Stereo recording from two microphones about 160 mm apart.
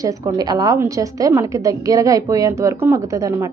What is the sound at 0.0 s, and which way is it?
A woman's voice, 20° right (ahead or behind).